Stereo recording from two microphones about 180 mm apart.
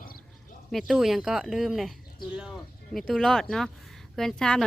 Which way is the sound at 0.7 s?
Centre (ahead or behind).